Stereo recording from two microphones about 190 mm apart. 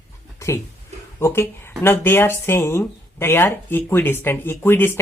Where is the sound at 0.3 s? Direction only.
15° left (ahead or behind).